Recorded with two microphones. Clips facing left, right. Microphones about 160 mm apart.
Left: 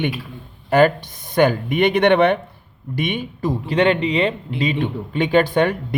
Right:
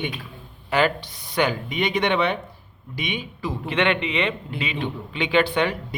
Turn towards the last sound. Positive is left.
turn(degrees=50)  # may be behind; listen again after turning